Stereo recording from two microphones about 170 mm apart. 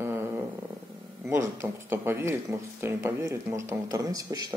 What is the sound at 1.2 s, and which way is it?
Speech, 15° right (ahead or behind).